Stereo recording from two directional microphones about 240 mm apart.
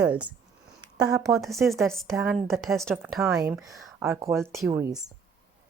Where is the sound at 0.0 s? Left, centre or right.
Centre.